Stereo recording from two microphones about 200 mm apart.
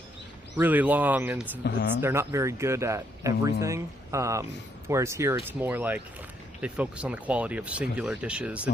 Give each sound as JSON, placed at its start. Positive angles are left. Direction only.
{"t": 0.5, "sound": "speech", "side_deg": -10}
{"t": 1.6, "sound": "speech", "side_deg": 55}
{"t": 2.0, "sound": "speech", "side_deg": -15}